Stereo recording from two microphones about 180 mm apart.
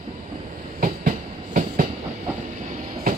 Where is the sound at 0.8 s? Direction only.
45° right (ahead or behind).